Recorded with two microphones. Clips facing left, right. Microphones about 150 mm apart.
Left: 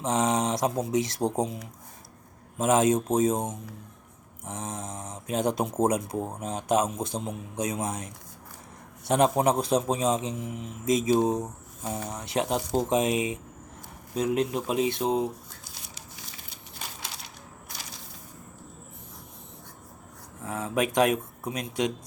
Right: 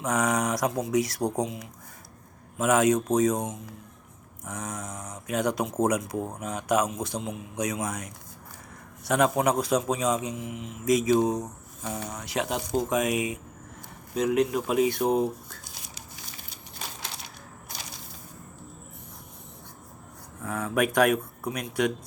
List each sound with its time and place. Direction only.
0.0 s a man's voice: 25° left (ahead or behind)
10.8 s a man's voice: 25° left (ahead or behind)
20.4 s a man's voice: 20° left (ahead or behind)